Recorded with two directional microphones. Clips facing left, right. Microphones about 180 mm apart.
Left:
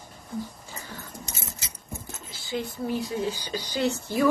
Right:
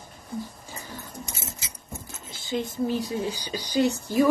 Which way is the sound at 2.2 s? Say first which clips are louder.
Right 2 dB; 20° right (ahead or behind).